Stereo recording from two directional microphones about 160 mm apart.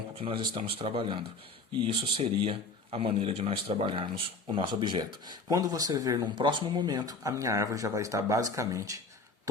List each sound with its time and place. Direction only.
0.2 s a man's voice: 35° right (ahead or behind); by 9.0 s 20° right (ahead or behind)